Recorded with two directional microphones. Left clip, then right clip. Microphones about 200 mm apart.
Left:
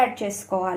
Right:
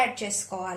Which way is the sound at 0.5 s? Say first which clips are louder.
Left 12 dB; 30° left (ahead or behind).